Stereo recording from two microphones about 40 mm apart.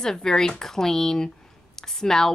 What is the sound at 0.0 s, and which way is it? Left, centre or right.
A woman's voice, centre.